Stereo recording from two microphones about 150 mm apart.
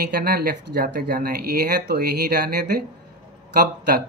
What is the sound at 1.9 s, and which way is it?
Speech, 90° right.